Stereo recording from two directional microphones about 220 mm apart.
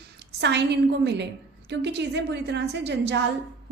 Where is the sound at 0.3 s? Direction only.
50° right (ahead or behind).